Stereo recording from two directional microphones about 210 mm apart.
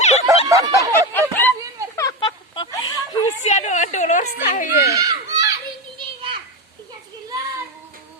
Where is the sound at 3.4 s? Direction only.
35° left (ahead or behind).